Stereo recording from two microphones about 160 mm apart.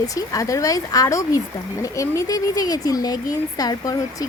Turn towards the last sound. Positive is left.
turn(degrees=25)  # may be behind; listen again after turning